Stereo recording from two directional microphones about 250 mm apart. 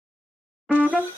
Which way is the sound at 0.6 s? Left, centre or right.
Centre.